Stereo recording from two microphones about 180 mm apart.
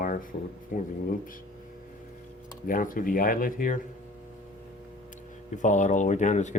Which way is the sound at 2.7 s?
50° left (ahead or behind).